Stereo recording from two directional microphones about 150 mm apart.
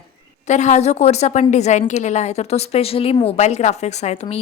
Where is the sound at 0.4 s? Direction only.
50° left (ahead or behind).